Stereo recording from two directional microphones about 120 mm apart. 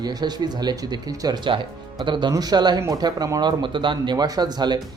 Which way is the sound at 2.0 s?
40° right (ahead or behind).